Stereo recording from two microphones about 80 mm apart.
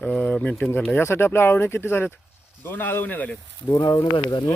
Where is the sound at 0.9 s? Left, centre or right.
Left.